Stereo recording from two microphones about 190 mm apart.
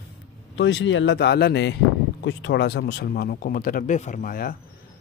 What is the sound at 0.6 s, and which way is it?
Speech, 70° left (ahead or behind).